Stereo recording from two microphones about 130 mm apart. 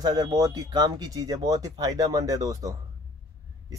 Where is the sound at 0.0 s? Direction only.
30° right (ahead or behind).